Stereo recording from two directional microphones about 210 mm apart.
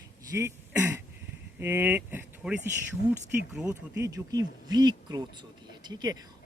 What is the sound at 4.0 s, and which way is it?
Speech, 20° right (ahead or behind).